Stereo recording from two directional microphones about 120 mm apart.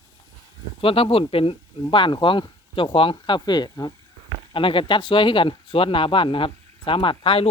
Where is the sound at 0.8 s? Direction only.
50° left (ahead or behind).